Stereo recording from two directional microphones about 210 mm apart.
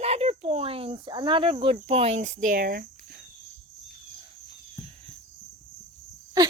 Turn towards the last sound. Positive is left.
turn(degrees=-15)  # may be behind; listen again after turning